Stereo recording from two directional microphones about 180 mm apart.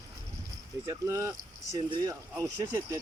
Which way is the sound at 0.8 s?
15° right (ahead or behind).